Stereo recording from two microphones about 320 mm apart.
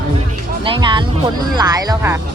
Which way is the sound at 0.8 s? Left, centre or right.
Centre.